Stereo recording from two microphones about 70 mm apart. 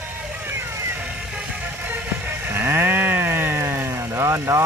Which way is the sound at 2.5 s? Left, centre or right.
Right.